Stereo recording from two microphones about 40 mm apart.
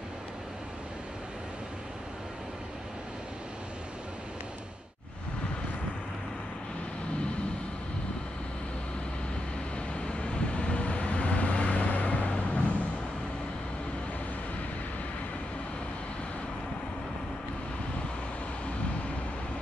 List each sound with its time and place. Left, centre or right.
9.9 s vehicle: left